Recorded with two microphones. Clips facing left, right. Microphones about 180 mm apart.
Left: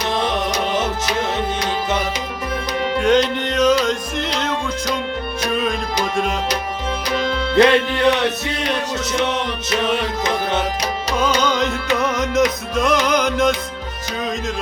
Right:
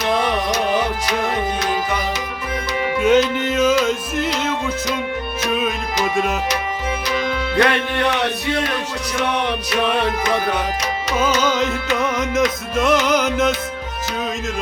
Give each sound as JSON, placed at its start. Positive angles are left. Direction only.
{"t": 2.8, "sound": "music", "side_deg": -5}
{"t": 7.5, "sound": "music", "side_deg": 25}
{"t": 11.3, "sound": "music", "side_deg": -5}